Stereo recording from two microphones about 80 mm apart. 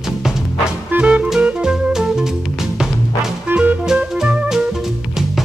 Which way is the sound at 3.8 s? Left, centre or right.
Centre.